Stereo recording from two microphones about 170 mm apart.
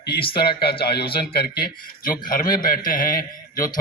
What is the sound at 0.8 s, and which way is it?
A man's voice, 70° left (ahead or behind).